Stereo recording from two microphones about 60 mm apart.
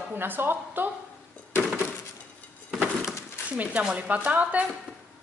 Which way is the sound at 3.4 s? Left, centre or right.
Right.